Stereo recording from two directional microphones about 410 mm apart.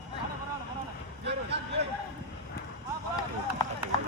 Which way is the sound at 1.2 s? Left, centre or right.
Right.